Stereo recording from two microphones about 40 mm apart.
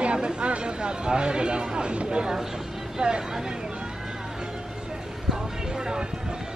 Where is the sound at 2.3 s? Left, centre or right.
Centre.